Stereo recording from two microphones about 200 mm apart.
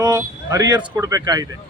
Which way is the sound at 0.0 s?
20° right (ahead or behind).